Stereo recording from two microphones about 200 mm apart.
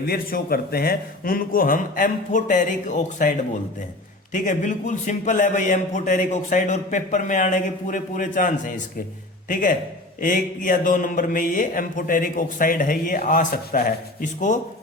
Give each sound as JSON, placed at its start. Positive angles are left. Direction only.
{"t": 0.0, "sound": "mantra", "side_deg": 50}
{"t": 4.3, "sound": "a man's voice", "side_deg": 40}
{"t": 10.2, "sound": "mantra", "side_deg": 40}